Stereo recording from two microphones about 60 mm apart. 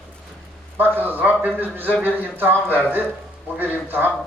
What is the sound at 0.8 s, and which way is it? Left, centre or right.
A man's voice, right.